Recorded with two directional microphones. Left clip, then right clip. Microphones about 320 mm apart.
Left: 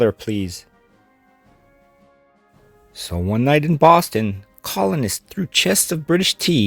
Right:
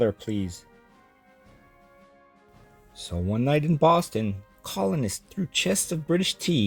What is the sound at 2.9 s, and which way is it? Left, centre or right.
Speech, left.